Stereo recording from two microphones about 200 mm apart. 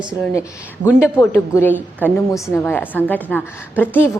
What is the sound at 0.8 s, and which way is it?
Speech, 40° right (ahead or behind).